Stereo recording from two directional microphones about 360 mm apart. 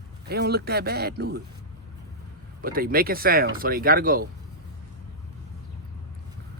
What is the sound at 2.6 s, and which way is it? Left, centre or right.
Speech, right.